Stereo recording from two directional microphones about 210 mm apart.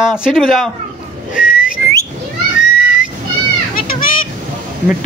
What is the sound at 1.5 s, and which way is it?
Whistling, 40° left (ahead or behind).